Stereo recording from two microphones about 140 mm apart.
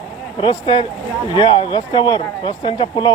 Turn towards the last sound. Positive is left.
turn(degrees=35)  # may be behind; listen again after turning